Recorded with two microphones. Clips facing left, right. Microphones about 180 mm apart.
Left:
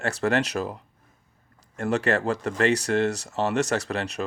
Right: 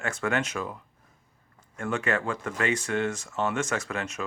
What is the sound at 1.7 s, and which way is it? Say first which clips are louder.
Speech: left 4 dB; 40° left (ahead or behind).